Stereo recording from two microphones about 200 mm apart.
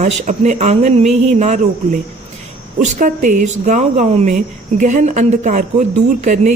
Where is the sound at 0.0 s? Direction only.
35° right (ahead or behind).